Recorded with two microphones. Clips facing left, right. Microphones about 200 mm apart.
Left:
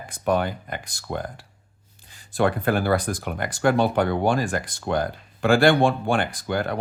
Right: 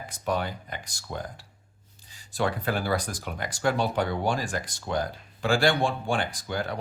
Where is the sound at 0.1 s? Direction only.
55° left (ahead or behind).